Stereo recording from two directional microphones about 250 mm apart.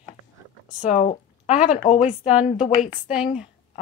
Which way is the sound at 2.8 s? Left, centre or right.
Centre.